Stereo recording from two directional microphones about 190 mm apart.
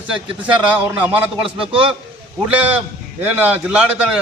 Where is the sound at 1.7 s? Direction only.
25° right (ahead or behind).